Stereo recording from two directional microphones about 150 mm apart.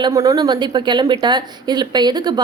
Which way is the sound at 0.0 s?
25° right (ahead or behind).